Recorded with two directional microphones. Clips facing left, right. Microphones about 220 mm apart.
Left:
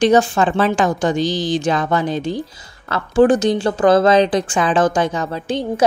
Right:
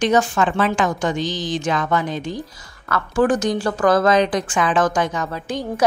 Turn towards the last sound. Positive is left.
turn(degrees=30)  # may be behind; listen again after turning